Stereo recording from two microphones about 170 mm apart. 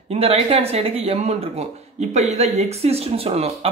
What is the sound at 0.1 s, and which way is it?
Speech, 35° right (ahead or behind).